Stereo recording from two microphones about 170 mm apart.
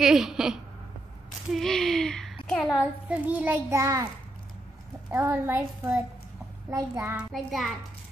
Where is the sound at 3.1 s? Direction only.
10° right (ahead or behind).